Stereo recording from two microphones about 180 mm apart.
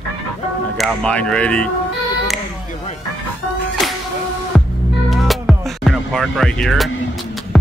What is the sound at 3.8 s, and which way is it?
Music, centre (ahead or behind).